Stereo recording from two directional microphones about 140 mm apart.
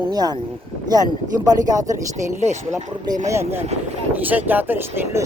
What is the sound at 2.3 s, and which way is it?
Speech, 55° right (ahead or behind).